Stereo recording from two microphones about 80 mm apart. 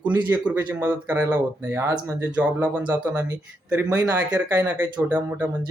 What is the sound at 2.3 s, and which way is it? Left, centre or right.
Speech, centre.